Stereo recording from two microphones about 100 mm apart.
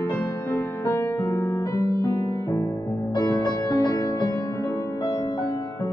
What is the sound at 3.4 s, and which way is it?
Music, 45° left (ahead or behind).